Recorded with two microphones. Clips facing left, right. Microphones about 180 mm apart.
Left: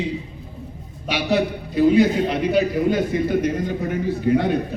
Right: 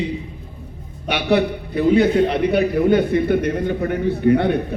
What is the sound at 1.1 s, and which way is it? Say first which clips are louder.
A man's voice: right 3 dB; 60° right (ahead or behind).